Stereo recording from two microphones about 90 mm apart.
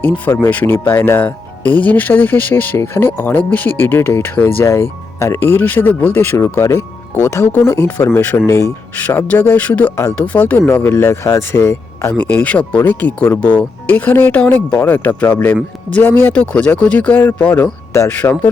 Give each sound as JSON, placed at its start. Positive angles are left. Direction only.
{"t": 0.5, "sound": "speech", "side_deg": 20}
{"t": 8.2, "sound": "speech", "side_deg": 20}
{"t": 8.4, "sound": "speech", "side_deg": 35}
{"t": 9.0, "sound": "speech", "side_deg": 15}
{"t": 12.1, "sound": "speech", "side_deg": 15}
{"t": 17.5, "sound": "speech", "side_deg": 35}